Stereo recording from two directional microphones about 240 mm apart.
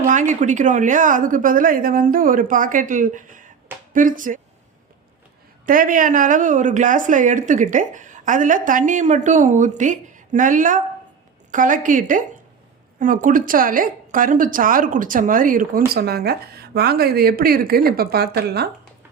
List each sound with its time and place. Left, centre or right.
0.0 s speech: right
5.6 s speech: right